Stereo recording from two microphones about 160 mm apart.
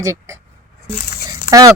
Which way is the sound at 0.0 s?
15° right (ahead or behind).